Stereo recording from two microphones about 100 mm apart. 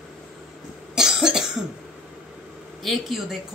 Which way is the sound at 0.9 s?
5° right (ahead or behind).